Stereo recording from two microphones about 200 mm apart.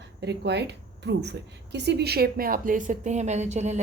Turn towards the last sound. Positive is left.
turn(degrees=-35)  # may be behind; listen again after turning